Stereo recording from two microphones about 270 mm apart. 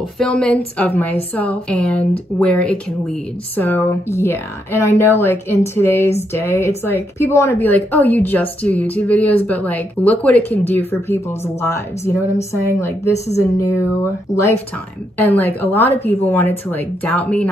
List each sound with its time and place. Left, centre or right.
0.2 s a woman's voice: centre